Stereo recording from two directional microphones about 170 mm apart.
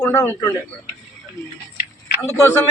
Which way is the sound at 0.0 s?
15° left (ahead or behind).